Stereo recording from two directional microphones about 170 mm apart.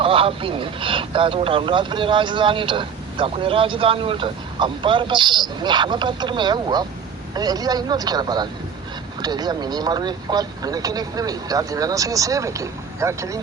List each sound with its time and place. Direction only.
0.0 s speech: 30° right (ahead or behind)